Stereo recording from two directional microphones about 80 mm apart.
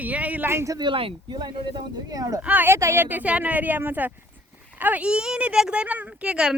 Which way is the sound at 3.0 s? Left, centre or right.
Centre.